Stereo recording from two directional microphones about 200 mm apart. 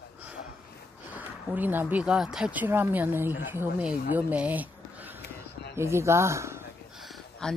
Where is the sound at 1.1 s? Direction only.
10° right (ahead or behind).